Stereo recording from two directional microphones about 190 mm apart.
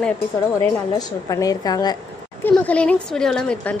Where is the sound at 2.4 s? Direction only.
5° left (ahead or behind).